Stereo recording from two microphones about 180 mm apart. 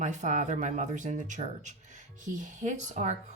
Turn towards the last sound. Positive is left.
turn(degrees=-40)  # may be behind; listen again after turning